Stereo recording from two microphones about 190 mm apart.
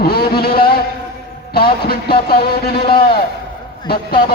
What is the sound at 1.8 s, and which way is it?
Speech, 55° left (ahead or behind).